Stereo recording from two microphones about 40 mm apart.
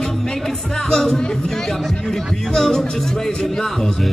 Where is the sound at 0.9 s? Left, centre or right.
Centre.